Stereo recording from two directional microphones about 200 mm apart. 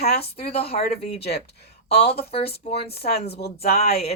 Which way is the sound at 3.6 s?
50° left (ahead or behind).